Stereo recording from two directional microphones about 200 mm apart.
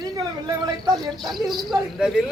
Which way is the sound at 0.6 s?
20° right (ahead or behind).